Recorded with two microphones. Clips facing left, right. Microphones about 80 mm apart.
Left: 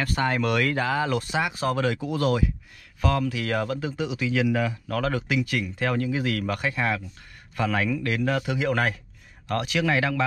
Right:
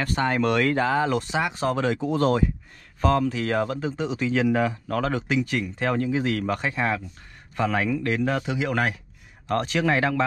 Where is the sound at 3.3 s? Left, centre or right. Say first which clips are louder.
Right 2 dB; centre.